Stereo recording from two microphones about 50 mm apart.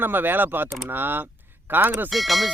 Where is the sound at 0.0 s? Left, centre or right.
Right.